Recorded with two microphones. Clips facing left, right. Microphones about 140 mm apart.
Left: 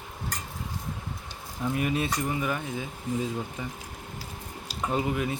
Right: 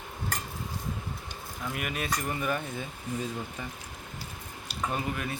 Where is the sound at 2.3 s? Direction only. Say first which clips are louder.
Left 1 dB; 10° left (ahead or behind).